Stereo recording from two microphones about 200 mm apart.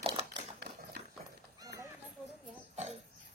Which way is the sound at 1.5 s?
20° right (ahead or behind).